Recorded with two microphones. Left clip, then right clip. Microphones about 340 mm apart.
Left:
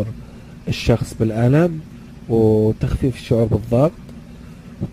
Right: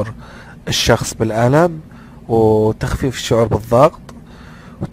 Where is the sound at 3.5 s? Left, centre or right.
Right.